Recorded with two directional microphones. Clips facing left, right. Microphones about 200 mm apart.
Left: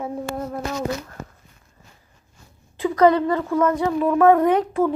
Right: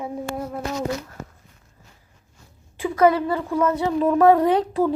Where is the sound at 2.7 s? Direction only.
10° right (ahead or behind).